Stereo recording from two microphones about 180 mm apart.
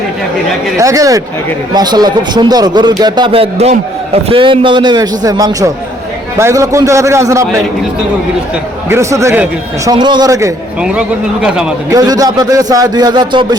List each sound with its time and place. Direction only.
0.8 s a man's voice: 20° right (ahead or behind)
8.9 s a man's voice: 15° right (ahead or behind)
9.9 s a man's voice: 25° right (ahead or behind)
10.8 s speech: 5° right (ahead or behind)
11.9 s a man's voice: 20° right (ahead or behind)